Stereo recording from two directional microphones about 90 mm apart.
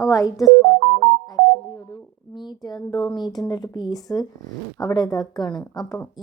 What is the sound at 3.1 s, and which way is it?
A woman's voice, 50° left (ahead or behind).